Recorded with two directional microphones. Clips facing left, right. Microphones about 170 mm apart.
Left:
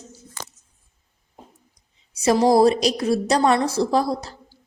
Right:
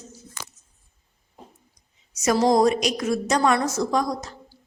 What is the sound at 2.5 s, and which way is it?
A woman's voice, 30° left (ahead or behind).